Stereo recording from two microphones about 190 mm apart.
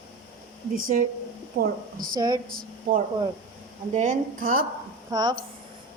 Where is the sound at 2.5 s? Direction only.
50° right (ahead or behind).